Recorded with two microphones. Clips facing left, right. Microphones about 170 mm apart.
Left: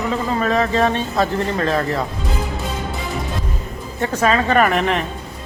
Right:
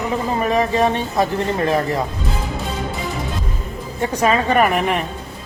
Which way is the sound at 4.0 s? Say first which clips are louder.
Even; 15° right (ahead or behind).